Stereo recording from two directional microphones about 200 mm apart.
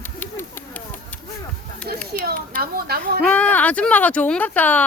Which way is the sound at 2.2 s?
50° right (ahead or behind).